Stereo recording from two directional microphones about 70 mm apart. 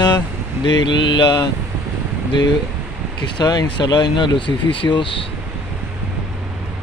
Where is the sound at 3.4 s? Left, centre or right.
Left.